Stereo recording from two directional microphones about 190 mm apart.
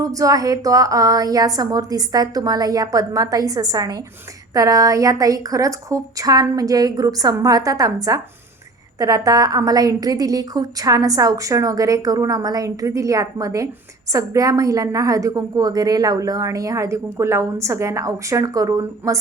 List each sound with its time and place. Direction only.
0.0 s a woman's voice: 15° right (ahead or behind)